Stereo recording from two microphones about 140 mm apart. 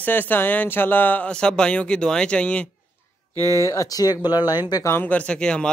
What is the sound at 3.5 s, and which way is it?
Speech, 20° left (ahead or behind).